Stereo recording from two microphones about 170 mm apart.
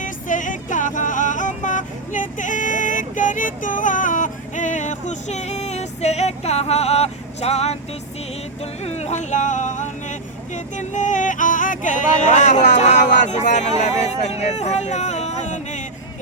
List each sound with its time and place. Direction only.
0.0 s vehicle: 50° left (ahead or behind)
8.8 s speech: 40° left (ahead or behind)